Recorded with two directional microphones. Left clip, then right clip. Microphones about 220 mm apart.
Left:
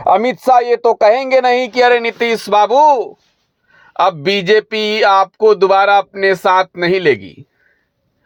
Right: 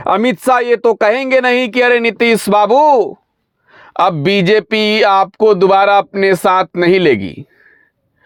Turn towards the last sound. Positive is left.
turn(degrees=-40)  # may be behind; listen again after turning